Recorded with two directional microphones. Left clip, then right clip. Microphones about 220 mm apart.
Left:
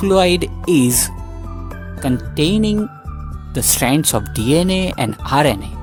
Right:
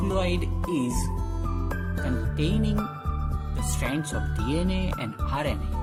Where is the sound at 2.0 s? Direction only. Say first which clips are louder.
Left 14 dB; 50° left (ahead or behind).